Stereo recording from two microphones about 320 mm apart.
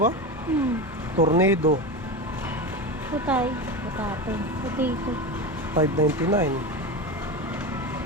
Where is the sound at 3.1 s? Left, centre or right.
Centre.